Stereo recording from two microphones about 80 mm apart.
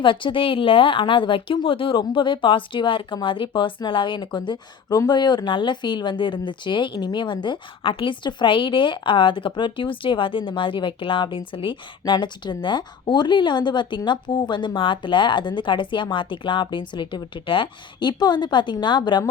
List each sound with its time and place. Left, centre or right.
0.0 s a woman's voice: left
4.9 s speech: left